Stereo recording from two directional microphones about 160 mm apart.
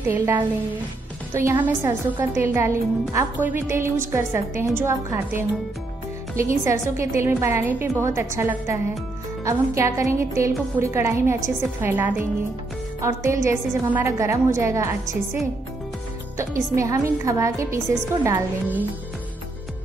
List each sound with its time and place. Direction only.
0.1 s a woman's voice: 10° right (ahead or behind)
16.3 s a woman's voice: 20° right (ahead or behind)